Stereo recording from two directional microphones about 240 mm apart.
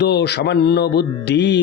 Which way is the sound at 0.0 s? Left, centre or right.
Left.